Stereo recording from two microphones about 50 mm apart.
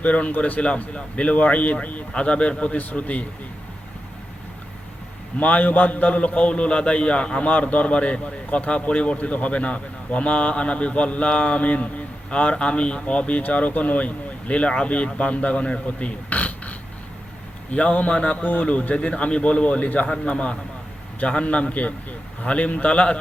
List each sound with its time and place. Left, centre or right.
0.0 s a man's voice: left
5.4 s a man's voice: left